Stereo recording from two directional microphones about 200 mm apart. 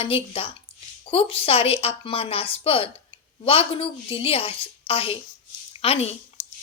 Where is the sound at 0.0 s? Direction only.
30° left (ahead or behind).